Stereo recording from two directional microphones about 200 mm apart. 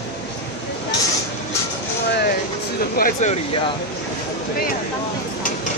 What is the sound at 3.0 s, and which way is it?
Speech, 40° left (ahead or behind).